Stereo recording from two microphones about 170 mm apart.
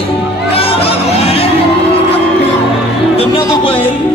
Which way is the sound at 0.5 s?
35° left (ahead or behind).